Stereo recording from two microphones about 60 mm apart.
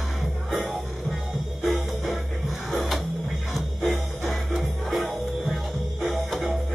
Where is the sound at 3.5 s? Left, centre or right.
Centre.